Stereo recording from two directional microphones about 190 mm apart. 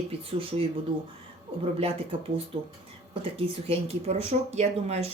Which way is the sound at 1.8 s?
30° right (ahead or behind).